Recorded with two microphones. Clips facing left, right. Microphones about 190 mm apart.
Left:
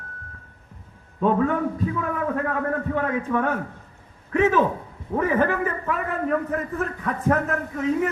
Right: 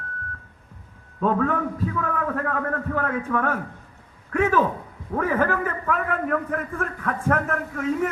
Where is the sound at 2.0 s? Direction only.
10° left (ahead or behind).